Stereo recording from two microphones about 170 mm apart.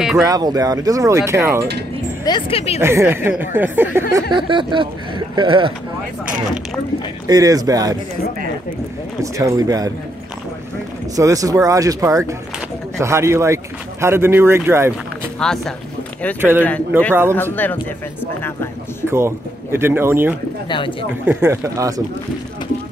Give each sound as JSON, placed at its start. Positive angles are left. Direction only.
{"t": 0.2, "sound": "speech", "side_deg": -20}
{"t": 2.2, "sound": "speech", "side_deg": 30}
{"t": 2.8, "sound": "speech", "side_deg": -15}
{"t": 4.1, "sound": "speech", "side_deg": -30}
{"t": 7.2, "sound": "speech", "side_deg": -20}
{"t": 9.2, "sound": "speech", "side_deg": -20}
{"t": 11.1, "sound": "speech", "side_deg": -20}
{"t": 15.3, "sound": "speech", "side_deg": 5}
{"t": 16.3, "sound": "speech", "side_deg": -15}
{"t": 17.4, "sound": "speech", "side_deg": 10}
{"t": 19.0, "sound": "speech", "side_deg": -15}
{"t": 20.6, "sound": "speech", "side_deg": 30}
{"t": 21.3, "sound": "speech", "side_deg": -15}